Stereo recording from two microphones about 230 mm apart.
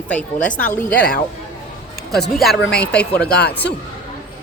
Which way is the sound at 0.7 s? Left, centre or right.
Centre.